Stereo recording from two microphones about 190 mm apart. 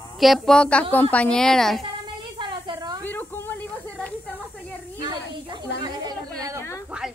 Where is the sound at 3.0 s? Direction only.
10° left (ahead or behind).